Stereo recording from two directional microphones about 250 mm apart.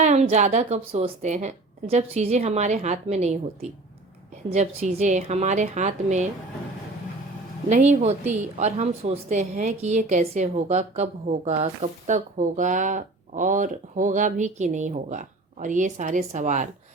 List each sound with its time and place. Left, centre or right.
0.0 s a woman's voice: right
7.7 s a woman's voice: right